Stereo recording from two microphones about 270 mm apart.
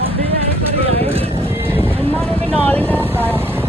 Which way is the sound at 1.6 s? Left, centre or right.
Centre.